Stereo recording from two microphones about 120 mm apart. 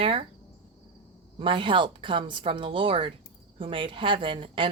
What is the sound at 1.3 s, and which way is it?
A woman's voice, 45° right (ahead or behind).